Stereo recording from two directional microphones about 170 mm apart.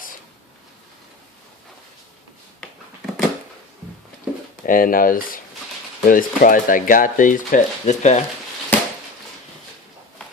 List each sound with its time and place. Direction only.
4.3 s pigeon: 5° right (ahead or behind)
4.6 s speech: 55° left (ahead or behind)
8.7 s a sound: 10° left (ahead or behind)